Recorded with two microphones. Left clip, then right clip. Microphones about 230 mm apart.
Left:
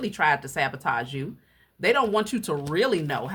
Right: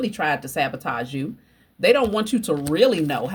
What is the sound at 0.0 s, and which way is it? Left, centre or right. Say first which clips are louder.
Speech: even; centre.